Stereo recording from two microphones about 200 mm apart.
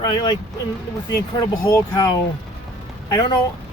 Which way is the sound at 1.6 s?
20° left (ahead or behind).